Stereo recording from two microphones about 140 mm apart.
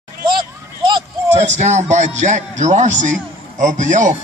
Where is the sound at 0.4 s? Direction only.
35° right (ahead or behind).